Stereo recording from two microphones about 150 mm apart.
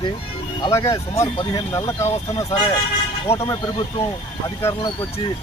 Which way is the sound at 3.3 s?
20° left (ahead or behind).